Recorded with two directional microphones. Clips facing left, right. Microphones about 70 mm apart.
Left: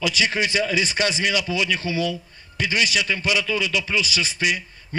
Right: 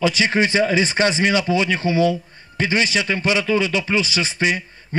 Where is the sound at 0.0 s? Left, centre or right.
Right.